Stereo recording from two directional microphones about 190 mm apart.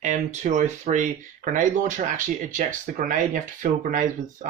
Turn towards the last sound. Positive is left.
turn(degrees=-45)  # may be behind; listen again after turning